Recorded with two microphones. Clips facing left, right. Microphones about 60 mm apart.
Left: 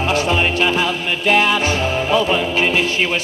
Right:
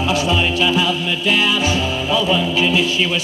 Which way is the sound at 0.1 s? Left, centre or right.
Left.